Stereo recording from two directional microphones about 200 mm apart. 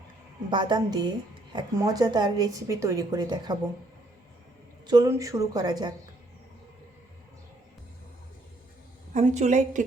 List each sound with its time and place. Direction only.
0.5 s a woman's voice: 20° right (ahead or behind)
4.9 s a woman's voice: 15° right (ahead or behind)
9.1 s a woman's voice: 35° right (ahead or behind)